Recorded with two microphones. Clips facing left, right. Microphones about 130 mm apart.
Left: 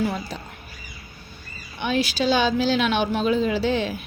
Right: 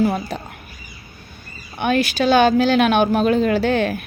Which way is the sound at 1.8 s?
55° right (ahead or behind).